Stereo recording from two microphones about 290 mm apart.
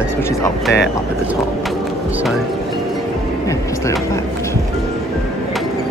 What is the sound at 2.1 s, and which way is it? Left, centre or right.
Music, centre.